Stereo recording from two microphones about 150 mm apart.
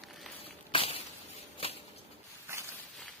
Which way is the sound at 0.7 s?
40° left (ahead or behind).